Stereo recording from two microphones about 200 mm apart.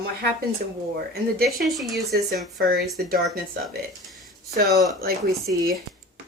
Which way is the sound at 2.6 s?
50° right (ahead or behind).